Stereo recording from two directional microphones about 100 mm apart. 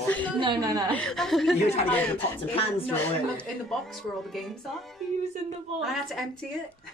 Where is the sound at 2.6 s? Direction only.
70° left (ahead or behind).